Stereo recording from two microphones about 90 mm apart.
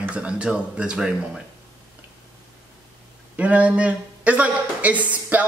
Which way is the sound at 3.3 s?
15° right (ahead or behind).